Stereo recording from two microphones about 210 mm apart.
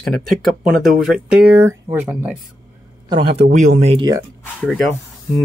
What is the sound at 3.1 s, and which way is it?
A man's voice, 25° right (ahead or behind).